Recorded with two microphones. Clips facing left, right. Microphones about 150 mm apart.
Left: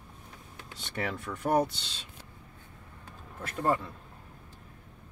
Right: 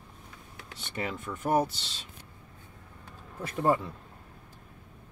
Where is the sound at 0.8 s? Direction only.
Centre (ahead or behind).